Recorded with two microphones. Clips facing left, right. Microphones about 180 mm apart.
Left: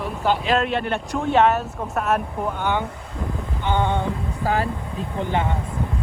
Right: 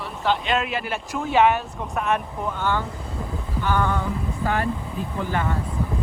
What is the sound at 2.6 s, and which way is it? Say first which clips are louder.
Speech: even; 15° left (ahead or behind).